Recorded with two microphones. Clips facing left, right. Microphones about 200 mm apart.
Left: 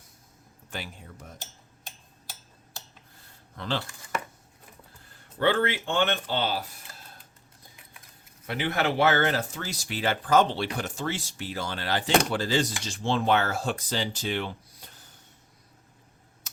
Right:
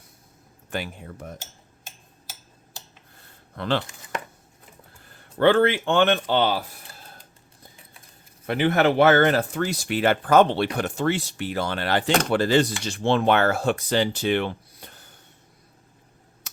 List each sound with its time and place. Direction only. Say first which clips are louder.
0.7 s speech: right 8 dB; 60° right (ahead or behind)
3.5 s speech: right 7 dB; 65° right (ahead or behind)
5.4 s speech: right 7 dB; 65° right (ahead or behind)
8.4 s speech: right 7 dB; 55° right (ahead or behind)